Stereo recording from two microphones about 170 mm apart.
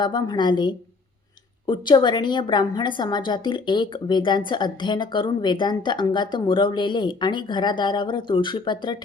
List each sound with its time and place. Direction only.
0.0 s a woman's voice: 25° left (ahead or behind)